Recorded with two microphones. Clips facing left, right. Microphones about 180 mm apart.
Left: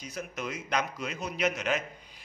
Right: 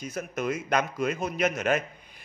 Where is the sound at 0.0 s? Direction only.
50° right (ahead or behind).